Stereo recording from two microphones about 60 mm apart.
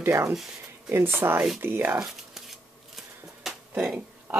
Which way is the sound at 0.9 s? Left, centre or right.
Right.